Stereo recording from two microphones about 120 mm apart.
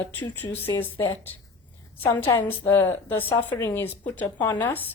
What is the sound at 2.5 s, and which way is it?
A woman's voice, 20° left (ahead or behind).